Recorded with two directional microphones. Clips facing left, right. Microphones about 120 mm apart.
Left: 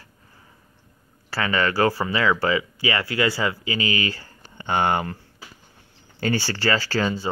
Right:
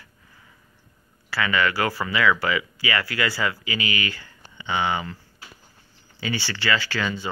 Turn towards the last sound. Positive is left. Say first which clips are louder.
# left 4 dB
turn(degrees=35)  # may be behind; listen again after turning